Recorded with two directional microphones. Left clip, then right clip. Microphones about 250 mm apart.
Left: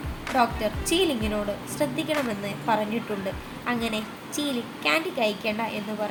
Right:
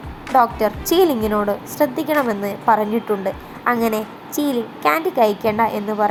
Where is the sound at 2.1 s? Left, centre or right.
Centre.